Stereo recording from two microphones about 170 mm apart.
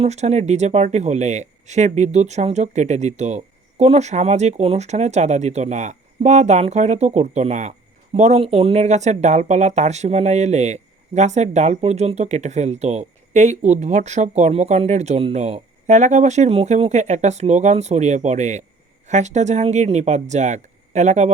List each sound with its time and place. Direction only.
0.0 s speech: 40° right (ahead or behind)